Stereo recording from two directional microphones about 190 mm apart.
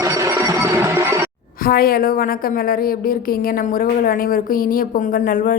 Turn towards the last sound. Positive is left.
turn(degrees=45)  # may be behind; listen again after turning